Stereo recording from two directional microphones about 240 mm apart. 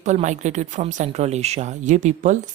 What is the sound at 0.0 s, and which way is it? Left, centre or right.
Speech, right.